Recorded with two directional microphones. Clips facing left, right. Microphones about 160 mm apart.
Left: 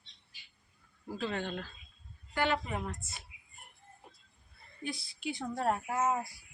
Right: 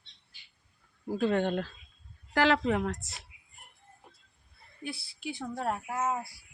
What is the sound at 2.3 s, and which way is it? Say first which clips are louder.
Speech: right 7 dB; 90° right.